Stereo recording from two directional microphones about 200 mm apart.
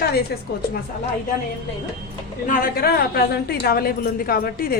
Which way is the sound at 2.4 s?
45° left (ahead or behind).